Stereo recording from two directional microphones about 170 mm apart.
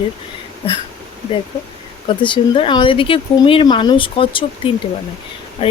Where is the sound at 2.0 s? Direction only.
30° left (ahead or behind).